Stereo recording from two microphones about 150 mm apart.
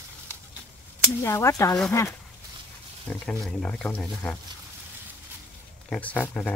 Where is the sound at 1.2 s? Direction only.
20° left (ahead or behind).